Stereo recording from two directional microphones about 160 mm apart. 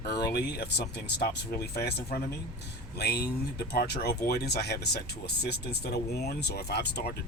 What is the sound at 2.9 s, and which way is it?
Speech, 90° left.